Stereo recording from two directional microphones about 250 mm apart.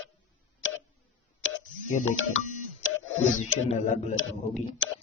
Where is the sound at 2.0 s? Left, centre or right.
Left.